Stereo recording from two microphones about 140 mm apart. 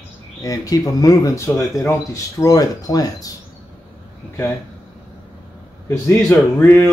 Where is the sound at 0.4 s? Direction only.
25° left (ahead or behind).